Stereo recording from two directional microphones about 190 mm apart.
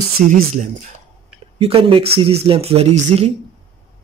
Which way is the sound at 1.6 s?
30° right (ahead or behind).